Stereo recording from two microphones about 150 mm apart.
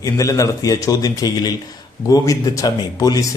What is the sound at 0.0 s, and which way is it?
A man's voice, 20° left (ahead or behind).